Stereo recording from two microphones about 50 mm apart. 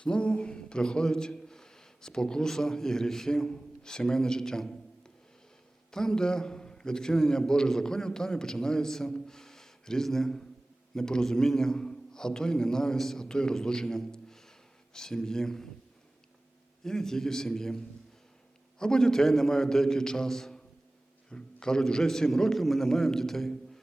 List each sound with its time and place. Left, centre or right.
0.0 s a man's voice: centre
16.8 s a man's voice: centre